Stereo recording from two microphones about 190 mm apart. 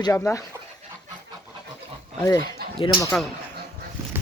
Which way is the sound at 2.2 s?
20° left (ahead or behind).